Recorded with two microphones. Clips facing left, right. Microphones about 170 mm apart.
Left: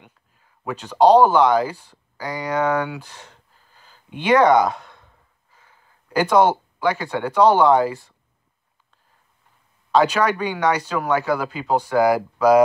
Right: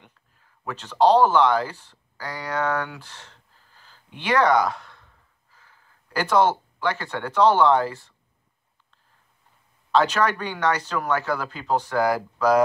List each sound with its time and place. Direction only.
0.7 s speech: 15° left (ahead or behind)
9.9 s speech: 10° left (ahead or behind)